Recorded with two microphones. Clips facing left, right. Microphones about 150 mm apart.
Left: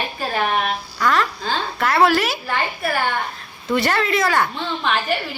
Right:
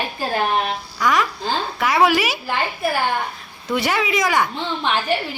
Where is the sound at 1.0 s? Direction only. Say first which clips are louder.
Even; 10° right (ahead or behind).